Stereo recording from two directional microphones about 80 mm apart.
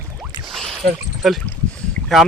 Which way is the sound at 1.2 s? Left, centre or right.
Centre.